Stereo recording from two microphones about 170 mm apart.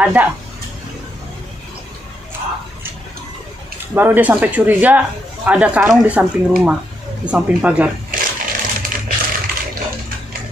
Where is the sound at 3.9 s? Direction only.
15° right (ahead or behind).